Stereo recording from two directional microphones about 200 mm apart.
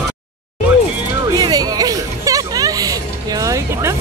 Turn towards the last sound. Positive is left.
turn(degrees=-15)  # may be behind; listen again after turning